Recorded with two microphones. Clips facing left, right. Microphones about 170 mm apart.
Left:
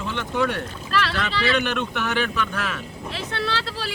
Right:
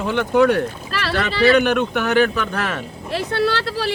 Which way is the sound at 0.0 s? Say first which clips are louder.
Right 9 dB; 60° right (ahead or behind).